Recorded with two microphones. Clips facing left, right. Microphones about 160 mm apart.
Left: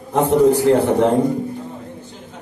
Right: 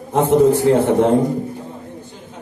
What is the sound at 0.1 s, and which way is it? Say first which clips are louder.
A man's voice: right 1 dB; 25° right (ahead or behind).